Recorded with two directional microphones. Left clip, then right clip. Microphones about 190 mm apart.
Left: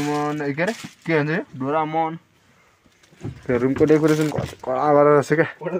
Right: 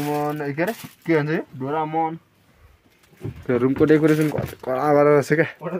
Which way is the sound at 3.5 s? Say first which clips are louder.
Even; 25° right (ahead or behind).